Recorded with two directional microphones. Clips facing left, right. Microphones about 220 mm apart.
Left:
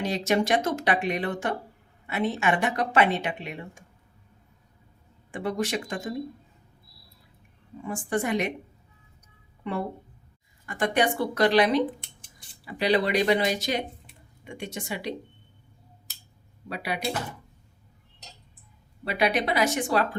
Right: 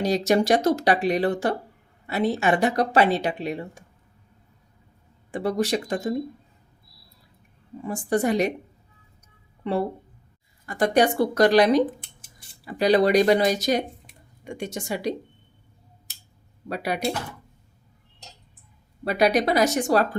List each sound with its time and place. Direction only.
0.0 s speech: 40° right (ahead or behind)
5.3 s speech: 35° right (ahead or behind)
7.9 s speech: 40° right (ahead or behind)
9.6 s speech: 35° right (ahead or behind)
16.6 s speech: 45° right (ahead or behind)
19.0 s speech: 40° right (ahead or behind)